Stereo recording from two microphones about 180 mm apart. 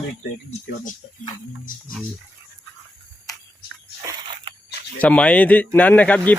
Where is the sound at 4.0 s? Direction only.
20° right (ahead or behind).